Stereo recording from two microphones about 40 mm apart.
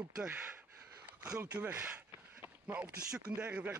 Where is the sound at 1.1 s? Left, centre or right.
Right.